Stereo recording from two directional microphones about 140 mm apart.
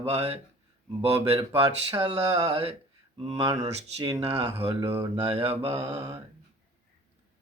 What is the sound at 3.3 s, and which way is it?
Speech, 25° right (ahead or behind).